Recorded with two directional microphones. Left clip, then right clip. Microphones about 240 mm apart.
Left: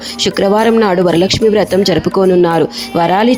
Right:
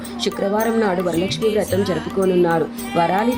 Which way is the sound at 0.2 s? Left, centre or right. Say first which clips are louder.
Left 9 dB; left.